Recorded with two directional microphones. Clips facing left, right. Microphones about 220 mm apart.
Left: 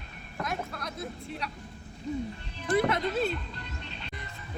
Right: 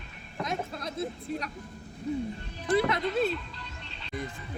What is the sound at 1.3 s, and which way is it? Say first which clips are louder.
Speech: right 5 dB; 40° right (ahead or behind).